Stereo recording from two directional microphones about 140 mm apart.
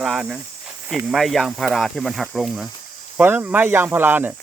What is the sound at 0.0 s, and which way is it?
Speech, centre (ahead or behind).